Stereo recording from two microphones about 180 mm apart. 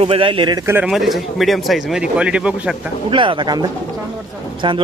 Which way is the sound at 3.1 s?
30° right (ahead or behind).